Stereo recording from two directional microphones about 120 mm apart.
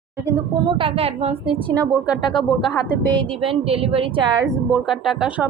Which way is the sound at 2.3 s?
Centre (ahead or behind).